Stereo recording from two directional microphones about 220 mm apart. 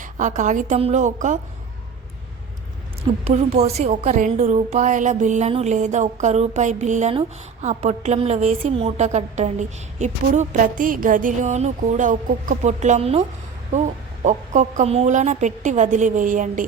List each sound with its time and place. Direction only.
0.0 s a woman's voice: 35° right (ahead or behind)
3.2 s a woman's voice: 30° right (ahead or behind)
14.3 s a woman's voice: 35° right (ahead or behind)